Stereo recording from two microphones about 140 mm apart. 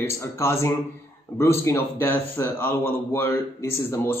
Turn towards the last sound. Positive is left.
turn(degrees=20)  # may be behind; listen again after turning